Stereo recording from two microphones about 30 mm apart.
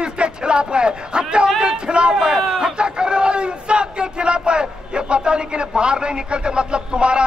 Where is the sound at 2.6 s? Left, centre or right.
Right.